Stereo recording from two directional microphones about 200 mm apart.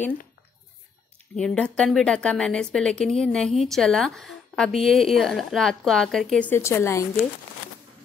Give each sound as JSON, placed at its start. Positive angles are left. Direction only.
{"t": 1.3, "sound": "a woman's voice", "side_deg": 5}